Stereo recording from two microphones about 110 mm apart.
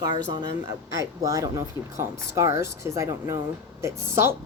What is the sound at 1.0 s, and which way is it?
A woman's voice, 30° right (ahead or behind).